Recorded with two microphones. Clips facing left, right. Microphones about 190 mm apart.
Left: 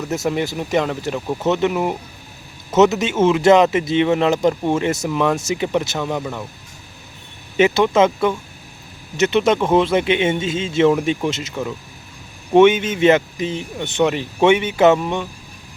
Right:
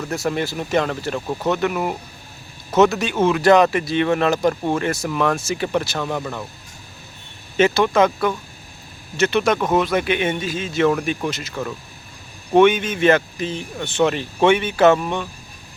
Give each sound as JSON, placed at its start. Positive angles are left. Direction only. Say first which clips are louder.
{"t": 0.1, "sound": "speech", "louder": "left 2 dB", "side_deg": 20}
{"t": 7.5, "sound": "speech", "louder": "left 2 dB", "side_deg": 20}
{"t": 12.5, "sound": "speech", "louder": "left 2 dB", "side_deg": 20}